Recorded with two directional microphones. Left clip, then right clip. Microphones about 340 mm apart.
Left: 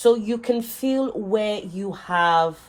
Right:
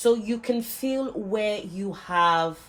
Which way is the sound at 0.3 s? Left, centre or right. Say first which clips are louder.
Left 4 dB; centre.